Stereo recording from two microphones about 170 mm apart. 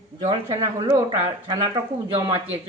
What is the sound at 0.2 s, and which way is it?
Speech, 20° right (ahead or behind).